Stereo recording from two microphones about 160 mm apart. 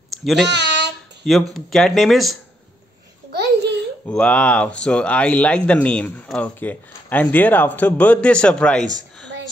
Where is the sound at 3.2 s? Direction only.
90° right.